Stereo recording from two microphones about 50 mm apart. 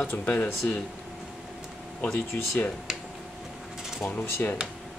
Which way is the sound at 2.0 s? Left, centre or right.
Left.